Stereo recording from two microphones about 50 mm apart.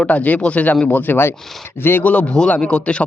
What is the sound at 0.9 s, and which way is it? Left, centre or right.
Speech, left.